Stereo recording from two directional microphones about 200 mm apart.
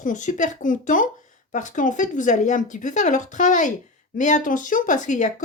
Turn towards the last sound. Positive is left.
turn(degrees=40)  # may be behind; listen again after turning